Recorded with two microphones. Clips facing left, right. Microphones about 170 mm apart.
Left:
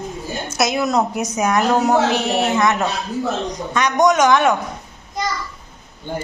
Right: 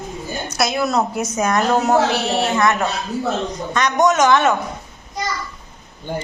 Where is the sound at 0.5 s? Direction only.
20° left (ahead or behind).